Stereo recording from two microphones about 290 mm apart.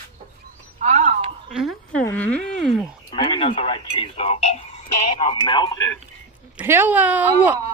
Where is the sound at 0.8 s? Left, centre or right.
Right.